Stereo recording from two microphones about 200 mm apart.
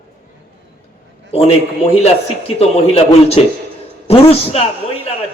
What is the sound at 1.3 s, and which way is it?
A man's voice, 30° left (ahead or behind).